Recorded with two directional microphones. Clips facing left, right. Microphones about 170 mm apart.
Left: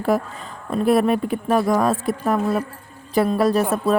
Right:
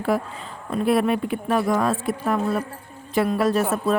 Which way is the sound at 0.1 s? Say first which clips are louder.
Left 3 dB; 40° left (ahead or behind).